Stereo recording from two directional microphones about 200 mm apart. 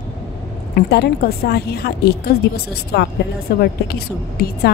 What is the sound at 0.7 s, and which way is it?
A woman's voice, 55° left (ahead or behind).